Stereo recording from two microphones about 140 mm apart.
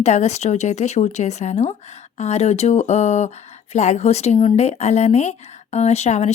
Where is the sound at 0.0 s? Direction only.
55° left (ahead or behind).